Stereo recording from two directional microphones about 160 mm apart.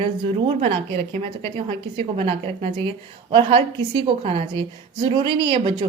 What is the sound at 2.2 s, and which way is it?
Speech, 35° right (ahead or behind).